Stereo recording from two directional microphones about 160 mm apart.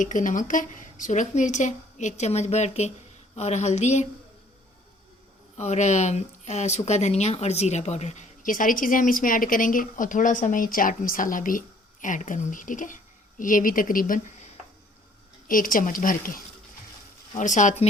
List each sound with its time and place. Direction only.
0.0 s speech: 55° left (ahead or behind)
5.5 s speech: 45° left (ahead or behind)